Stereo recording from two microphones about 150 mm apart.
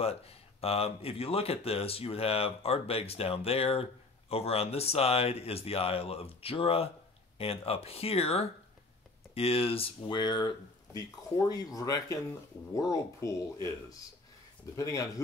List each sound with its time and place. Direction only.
0.0 s speech: 40° left (ahead or behind); by 13.4 s 20° left (ahead or behind)
14.8 s speech: 20° left (ahead or behind)